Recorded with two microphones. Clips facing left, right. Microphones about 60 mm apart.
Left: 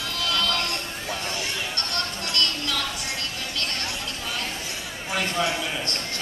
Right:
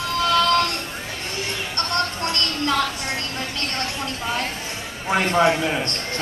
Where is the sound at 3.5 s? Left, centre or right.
Right.